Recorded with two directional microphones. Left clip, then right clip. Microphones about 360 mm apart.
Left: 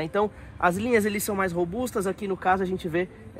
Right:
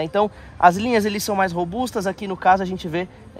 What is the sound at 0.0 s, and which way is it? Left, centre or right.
Speech, centre.